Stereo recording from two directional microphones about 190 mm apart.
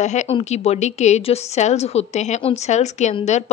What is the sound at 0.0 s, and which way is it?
A woman's voice, 40° left (ahead or behind).